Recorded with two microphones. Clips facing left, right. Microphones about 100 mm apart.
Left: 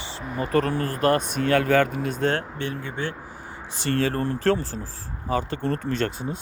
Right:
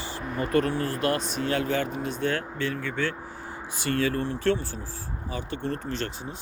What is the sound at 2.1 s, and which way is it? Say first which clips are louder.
Speech: left 4 dB; 40° left (ahead or behind).